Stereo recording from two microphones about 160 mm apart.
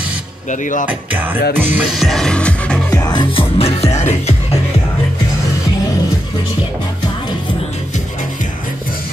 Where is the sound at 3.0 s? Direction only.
30° left (ahead or behind).